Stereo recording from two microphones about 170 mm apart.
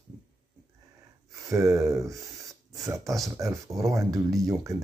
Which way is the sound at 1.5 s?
20° right (ahead or behind).